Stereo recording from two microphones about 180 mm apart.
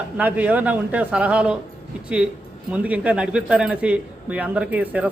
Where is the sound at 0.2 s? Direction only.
10° right (ahead or behind).